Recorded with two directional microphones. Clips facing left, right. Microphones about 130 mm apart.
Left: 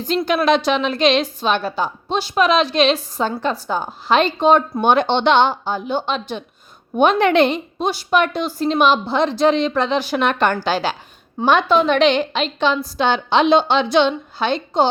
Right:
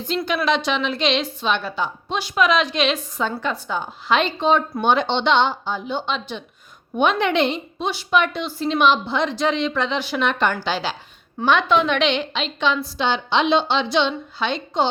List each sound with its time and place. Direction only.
0.3 s a woman's voice: 45° left (ahead or behind)